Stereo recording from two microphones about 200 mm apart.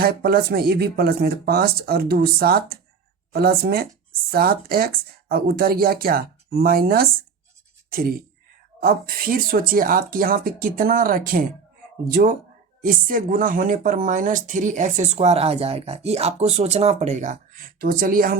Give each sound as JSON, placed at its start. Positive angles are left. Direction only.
{"t": 0.0, "sound": "speech", "side_deg": -50}